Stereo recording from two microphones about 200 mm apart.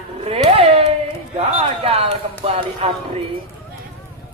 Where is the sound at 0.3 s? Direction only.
30° right (ahead or behind).